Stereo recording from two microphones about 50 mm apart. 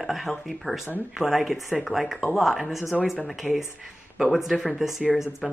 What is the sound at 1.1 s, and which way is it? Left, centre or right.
Speech, centre.